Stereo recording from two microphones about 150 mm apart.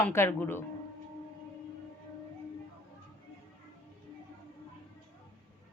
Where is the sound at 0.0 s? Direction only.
15° left (ahead or behind).